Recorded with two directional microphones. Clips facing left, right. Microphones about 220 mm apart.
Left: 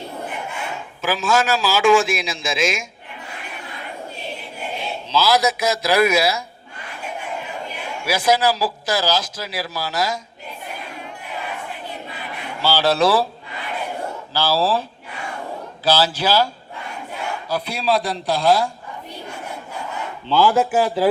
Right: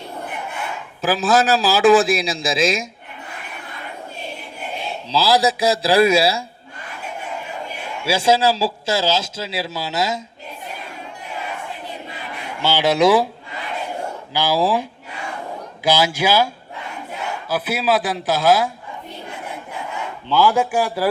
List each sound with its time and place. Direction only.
1.0 s a man's voice: 35° right (ahead or behind)
5.0 s a man's voice: 30° right (ahead or behind)
8.0 s a man's voice: 30° right (ahead or behind)
12.6 s speech: 15° right (ahead or behind)
14.3 s speech: 15° right (ahead or behind)
17.5 s a man's voice: 5° right (ahead or behind)
20.2 s speech: 15° right (ahead or behind)
20.5 s a man's voice: 5° left (ahead or behind)